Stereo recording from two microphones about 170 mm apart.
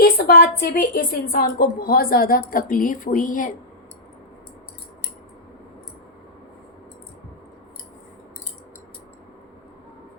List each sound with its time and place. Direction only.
0.0 s a woman's voice: 60° left (ahead or behind)